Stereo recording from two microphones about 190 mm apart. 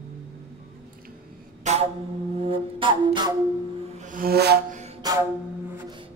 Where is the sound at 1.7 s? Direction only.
35° right (ahead or behind).